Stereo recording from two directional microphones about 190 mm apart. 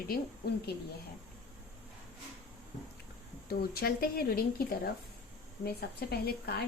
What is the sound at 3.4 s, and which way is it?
A woman's voice, 50° left (ahead or behind).